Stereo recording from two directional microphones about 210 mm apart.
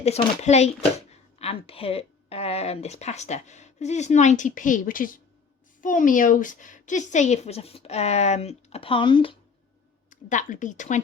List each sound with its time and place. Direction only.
0.0 s a woman's voice: 30° left (ahead or behind)
10.1 s a woman's voice: 35° left (ahead or behind)